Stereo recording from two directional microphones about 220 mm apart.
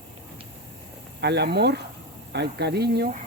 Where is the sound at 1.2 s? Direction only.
50° right (ahead or behind).